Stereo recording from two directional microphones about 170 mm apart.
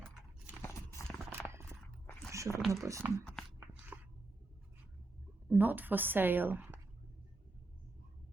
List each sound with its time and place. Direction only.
0.6 s clip-clop: 10° left (ahead or behind)
1.3 s clip-clop: 15° right (ahead or behind)
1.7 s a sound: 5° left (ahead or behind)
2.3 s a sound: 20° right (ahead or behind)
2.8 s a woman's voice: 15° right (ahead or behind)
5.5 s a woman's voice: 10° right (ahead or behind)